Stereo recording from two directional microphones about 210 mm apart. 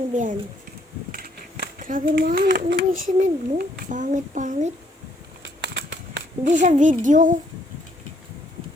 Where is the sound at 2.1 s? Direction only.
45° right (ahead or behind).